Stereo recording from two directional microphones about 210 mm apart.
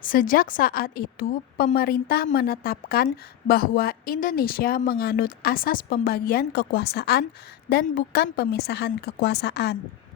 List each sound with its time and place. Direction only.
0.0 s a woman's voice: 40° left (ahead or behind)